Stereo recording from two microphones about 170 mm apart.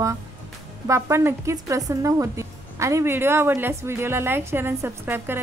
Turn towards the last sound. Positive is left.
turn(degrees=-15)  # may be behind; listen again after turning